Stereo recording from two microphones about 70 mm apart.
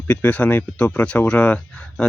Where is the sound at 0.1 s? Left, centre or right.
Left.